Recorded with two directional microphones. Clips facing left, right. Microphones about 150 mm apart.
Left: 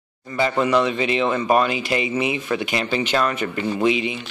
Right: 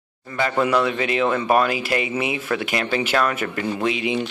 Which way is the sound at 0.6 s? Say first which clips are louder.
Even; 5° right (ahead or behind).